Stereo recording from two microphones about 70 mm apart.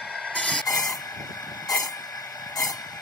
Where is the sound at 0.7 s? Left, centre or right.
Left.